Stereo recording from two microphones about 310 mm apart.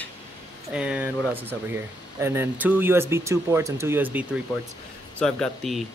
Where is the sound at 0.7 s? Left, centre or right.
Centre.